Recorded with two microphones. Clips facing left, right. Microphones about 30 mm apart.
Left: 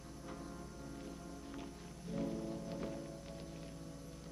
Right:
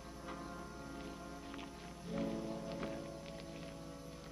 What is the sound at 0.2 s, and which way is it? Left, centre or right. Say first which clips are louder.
Music: right 2 dB; right.